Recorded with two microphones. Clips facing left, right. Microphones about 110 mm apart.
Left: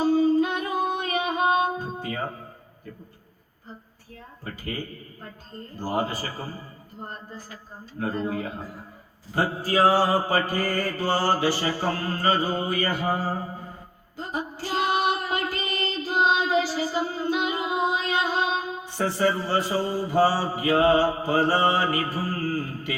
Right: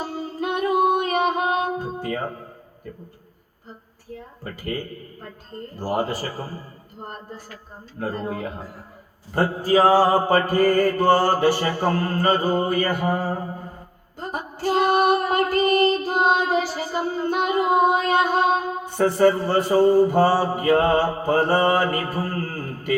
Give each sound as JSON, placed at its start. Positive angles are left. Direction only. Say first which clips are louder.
{"t": 0.0, "sound": "music", "louder": "left 8 dB", "side_deg": -60}
{"t": 4.4, "sound": "a man's voice", "louder": "right 4 dB", "side_deg": -55}
{"t": 8.1, "sound": "a man's voice", "louder": "left 1 dB", "side_deg": -60}
{"t": 9.4, "sound": "mantra", "louder": "right 4 dB", "side_deg": -50}
{"t": 14.2, "sound": "female singing", "louder": "right 2 dB", "side_deg": -55}
{"t": 22.1, "sound": "a sound", "louder": "even", "side_deg": -55}